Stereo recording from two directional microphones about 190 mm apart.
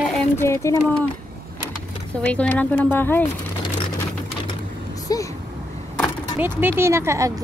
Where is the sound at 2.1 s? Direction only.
5° left (ahead or behind).